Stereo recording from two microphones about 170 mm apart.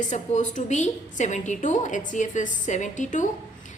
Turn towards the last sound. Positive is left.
turn(degrees=45)  # may be behind; listen again after turning